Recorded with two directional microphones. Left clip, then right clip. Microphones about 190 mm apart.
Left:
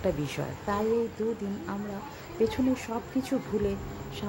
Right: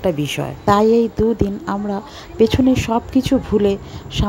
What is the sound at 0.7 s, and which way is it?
Speech, 40° right (ahead or behind).